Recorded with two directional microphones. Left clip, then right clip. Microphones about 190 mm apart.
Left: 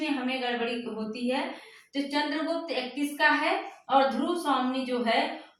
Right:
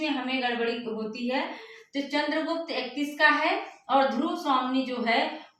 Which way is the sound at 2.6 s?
15° left (ahead or behind).